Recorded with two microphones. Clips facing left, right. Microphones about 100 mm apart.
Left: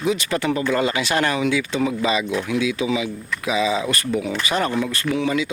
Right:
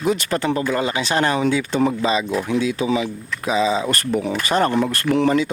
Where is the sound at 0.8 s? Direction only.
25° right (ahead or behind).